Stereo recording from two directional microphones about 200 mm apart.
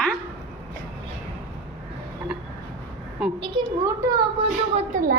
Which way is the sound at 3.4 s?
20° right (ahead or behind).